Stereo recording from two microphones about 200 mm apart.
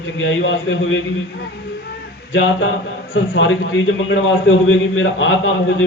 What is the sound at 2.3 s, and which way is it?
A man's voice, 80° left.